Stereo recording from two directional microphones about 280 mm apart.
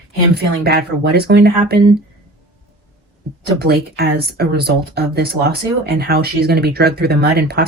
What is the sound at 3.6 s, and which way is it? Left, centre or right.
Speech, right.